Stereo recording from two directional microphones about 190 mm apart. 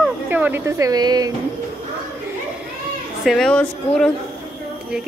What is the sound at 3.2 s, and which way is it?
Speech, centre (ahead or behind).